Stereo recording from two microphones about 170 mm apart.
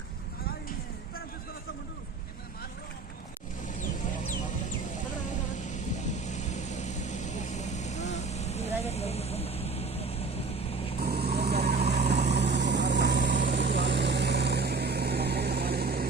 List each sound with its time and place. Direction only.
6.2 s vehicle: 45° left (ahead or behind)
11.0 s vehicle: 65° right (ahead or behind)
12.2 s vehicle: 90° right; by 16.0 s 65° right (ahead or behind)